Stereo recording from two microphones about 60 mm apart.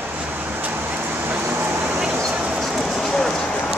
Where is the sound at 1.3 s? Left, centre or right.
Right.